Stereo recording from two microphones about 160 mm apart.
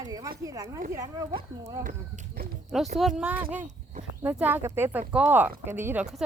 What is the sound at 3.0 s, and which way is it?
Speech, 5° right (ahead or behind).